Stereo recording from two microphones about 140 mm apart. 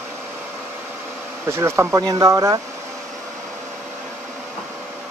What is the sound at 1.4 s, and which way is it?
Speech, 20° right (ahead or behind).